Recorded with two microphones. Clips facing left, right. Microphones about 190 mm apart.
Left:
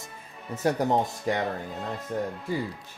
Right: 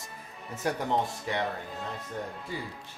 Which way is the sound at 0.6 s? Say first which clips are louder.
Left 5 dB; 40° left (ahead or behind).